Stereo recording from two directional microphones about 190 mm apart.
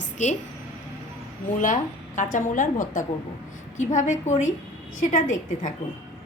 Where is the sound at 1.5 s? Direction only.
40° left (ahead or behind).